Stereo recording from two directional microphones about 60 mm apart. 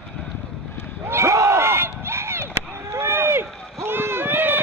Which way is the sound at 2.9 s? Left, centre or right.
Right.